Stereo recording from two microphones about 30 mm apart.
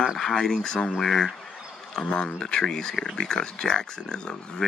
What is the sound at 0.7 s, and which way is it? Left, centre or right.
Speech, left.